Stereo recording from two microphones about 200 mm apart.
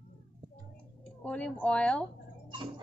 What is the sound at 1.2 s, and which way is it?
Speech, 5° left (ahead or behind).